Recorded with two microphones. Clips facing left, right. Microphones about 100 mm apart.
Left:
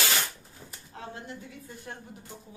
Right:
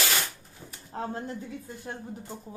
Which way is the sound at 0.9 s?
40° right (ahead or behind).